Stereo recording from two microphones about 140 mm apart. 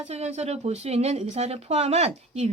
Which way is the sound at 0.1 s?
50° right (ahead or behind).